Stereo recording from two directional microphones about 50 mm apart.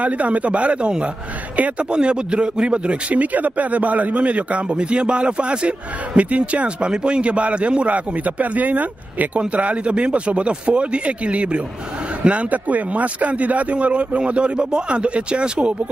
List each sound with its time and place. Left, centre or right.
0.0 s a man's voice: right
3.2 s a man's voice: right